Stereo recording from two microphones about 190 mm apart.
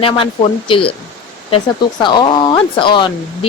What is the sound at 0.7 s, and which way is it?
Speech, 30° left (ahead or behind).